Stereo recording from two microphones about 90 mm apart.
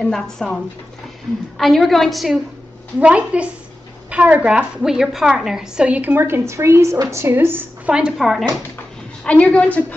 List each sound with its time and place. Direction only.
0.0 s a woman's voice: 5° left (ahead or behind)
1.6 s a woman's voice: centre (ahead or behind)
3.0 s a woman's voice: 15° right (ahead or behind)
4.8 s a woman's voice: 5° right (ahead or behind); by 7.9 s 25° right (ahead or behind)
7.9 s a woman's voice: 5° right (ahead or behind)
9.2 s a woman's voice: 15° left (ahead or behind)